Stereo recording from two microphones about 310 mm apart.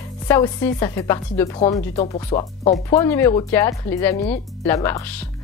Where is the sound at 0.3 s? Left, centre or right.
Centre.